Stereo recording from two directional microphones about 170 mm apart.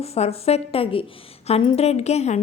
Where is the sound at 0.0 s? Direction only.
35° left (ahead or behind).